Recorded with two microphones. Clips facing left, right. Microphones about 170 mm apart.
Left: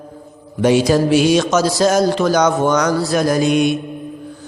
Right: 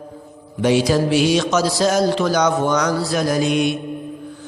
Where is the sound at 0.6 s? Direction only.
45° left (ahead or behind).